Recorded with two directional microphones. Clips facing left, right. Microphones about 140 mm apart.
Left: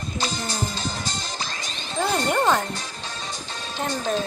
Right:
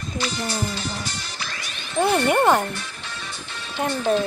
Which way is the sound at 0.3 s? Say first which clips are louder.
Right 2 dB; 15° left (ahead or behind).